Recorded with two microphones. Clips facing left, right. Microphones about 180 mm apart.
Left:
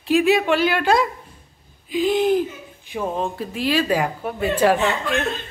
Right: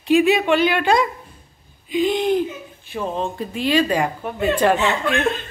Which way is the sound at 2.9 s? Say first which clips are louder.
Even; 10° left (ahead or behind).